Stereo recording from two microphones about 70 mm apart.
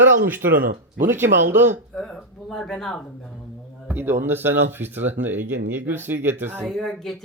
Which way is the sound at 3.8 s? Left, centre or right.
Right.